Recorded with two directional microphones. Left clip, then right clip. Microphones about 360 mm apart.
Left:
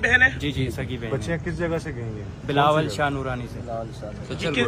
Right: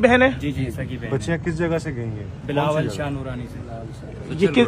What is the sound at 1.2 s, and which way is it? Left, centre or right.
Speech, right.